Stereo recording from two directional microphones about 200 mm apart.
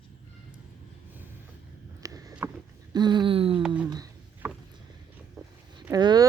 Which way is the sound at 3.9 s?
20° right (ahead or behind).